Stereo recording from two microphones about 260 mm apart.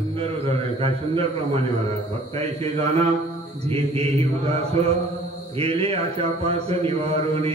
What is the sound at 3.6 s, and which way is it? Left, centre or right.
A man's voice, right.